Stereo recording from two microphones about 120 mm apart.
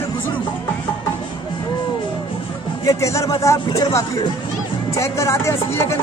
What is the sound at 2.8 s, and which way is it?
Speech, 25° left (ahead or behind).